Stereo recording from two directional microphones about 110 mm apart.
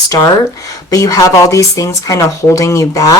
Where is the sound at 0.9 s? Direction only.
30° left (ahead or behind).